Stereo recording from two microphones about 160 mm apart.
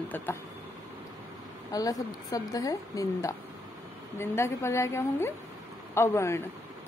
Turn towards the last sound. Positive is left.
turn(degrees=15)  # may be behind; listen again after turning